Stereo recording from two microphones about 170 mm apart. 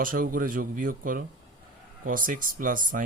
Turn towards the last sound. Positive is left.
turn(degrees=-50)  # may be behind; listen again after turning